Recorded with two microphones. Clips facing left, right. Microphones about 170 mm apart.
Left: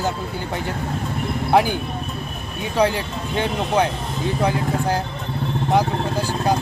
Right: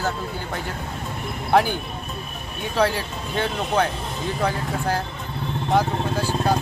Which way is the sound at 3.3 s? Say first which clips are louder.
Left 2 dB; 15° left (ahead or behind).